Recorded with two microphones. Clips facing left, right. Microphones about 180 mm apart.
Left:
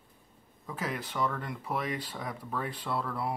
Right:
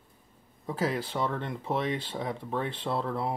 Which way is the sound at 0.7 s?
30° right (ahead or behind).